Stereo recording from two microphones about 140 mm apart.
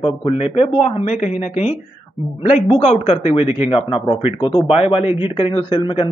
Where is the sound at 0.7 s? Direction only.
50° left (ahead or behind).